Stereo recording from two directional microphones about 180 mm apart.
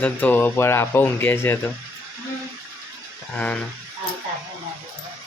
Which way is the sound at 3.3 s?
5° left (ahead or behind).